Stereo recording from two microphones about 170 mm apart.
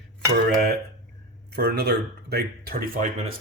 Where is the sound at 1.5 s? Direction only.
75° right (ahead or behind); by 3.1 s 55° right (ahead or behind).